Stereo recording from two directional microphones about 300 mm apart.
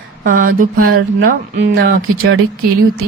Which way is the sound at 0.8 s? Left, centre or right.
Right.